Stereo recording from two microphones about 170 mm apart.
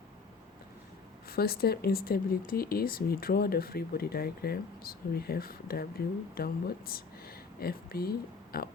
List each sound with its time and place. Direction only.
1.3 s speech: 65° left (ahead or behind)